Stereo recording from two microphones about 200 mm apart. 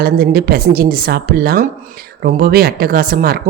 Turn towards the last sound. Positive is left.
turn(degrees=-50)  # may be behind; listen again after turning